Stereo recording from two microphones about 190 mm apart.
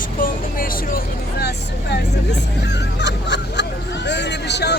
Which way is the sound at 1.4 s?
60° left (ahead or behind).